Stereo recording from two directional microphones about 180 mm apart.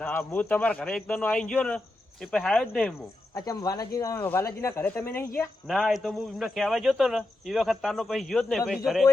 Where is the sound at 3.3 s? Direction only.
20° left (ahead or behind).